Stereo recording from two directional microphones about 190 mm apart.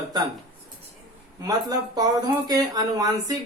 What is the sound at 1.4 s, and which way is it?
Speech, 20° right (ahead or behind).